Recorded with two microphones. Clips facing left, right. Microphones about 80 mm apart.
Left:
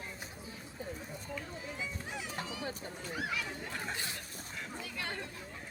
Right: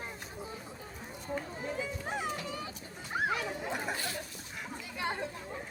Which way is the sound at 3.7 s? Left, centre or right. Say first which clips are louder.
Right 4 dB; centre.